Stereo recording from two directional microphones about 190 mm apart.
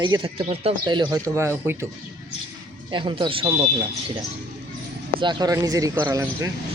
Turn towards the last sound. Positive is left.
turn(degrees=-15)  # may be behind; listen again after turning